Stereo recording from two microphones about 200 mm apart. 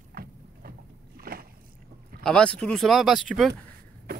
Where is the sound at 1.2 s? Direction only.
50° right (ahead or behind).